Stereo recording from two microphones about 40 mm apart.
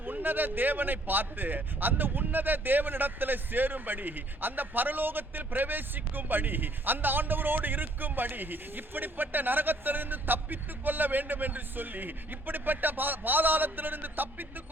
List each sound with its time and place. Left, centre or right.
0.0 s a man's voice: right